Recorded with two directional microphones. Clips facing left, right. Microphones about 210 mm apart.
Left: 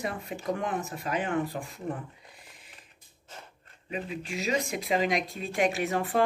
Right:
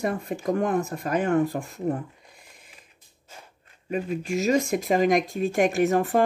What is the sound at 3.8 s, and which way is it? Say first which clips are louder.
Speech: right 7 dB; 45° right (ahead or behind).